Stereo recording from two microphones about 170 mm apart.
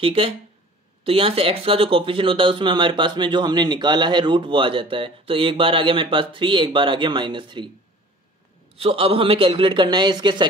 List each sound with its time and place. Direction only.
0.0 s a man's voice: 35° right (ahead or behind)
8.7 s a man's voice: 35° right (ahead or behind)